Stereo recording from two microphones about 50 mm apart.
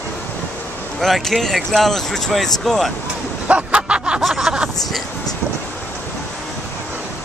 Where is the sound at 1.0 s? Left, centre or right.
Centre.